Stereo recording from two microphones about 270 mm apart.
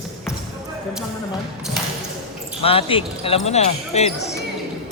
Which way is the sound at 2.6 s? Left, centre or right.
Left.